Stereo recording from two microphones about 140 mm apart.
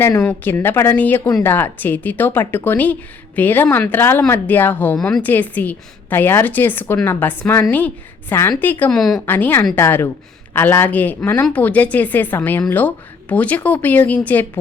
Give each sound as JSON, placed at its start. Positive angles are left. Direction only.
{"t": 0.0, "sound": "a woman's voice", "side_deg": 20}
{"t": 9.0, "sound": "speech", "side_deg": 0}
{"t": 9.2, "sound": "speech", "side_deg": 15}